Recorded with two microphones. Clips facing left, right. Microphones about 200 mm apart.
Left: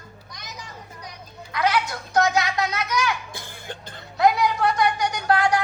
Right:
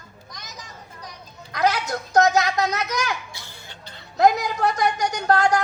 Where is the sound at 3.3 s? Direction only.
50° left (ahead or behind).